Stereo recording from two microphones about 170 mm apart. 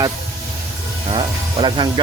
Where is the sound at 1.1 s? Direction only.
30° right (ahead or behind).